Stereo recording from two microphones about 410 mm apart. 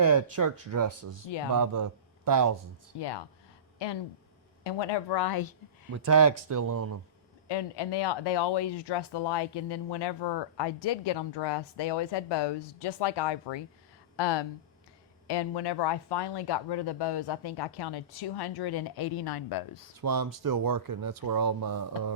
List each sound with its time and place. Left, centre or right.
0.0 s speech: right
1.5 s speech: right
3.0 s speech: left
3.8 s speech: left
4.6 s speech: left
6.1 s speech: right
7.4 s speech: left
20.0 s speech: right